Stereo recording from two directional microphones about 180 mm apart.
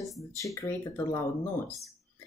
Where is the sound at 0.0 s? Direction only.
Centre (ahead or behind).